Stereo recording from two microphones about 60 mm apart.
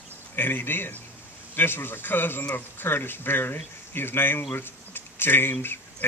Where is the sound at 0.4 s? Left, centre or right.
Left.